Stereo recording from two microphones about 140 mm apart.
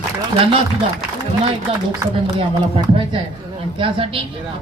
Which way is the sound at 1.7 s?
40° right (ahead or behind).